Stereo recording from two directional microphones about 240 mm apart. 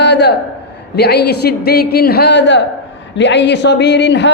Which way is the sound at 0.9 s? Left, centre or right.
Left.